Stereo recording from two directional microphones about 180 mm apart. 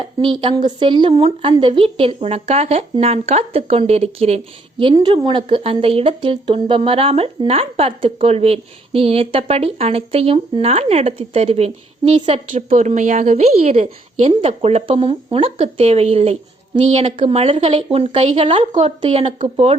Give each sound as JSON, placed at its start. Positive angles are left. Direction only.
{"t": 0.0, "sound": "speech", "side_deg": -30}
{"t": 4.8, "sound": "speech", "side_deg": -25}